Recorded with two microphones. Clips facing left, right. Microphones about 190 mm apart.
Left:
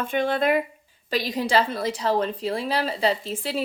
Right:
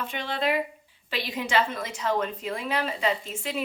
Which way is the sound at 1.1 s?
35° left (ahead or behind).